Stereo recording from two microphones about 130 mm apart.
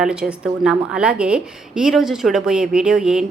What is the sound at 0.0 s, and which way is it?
A woman's voice, 5° right (ahead or behind).